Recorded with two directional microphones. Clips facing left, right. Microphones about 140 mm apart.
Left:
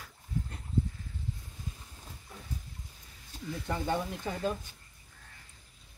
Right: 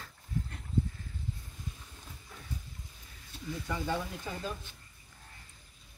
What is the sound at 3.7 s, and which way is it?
Speech, 25° left (ahead or behind).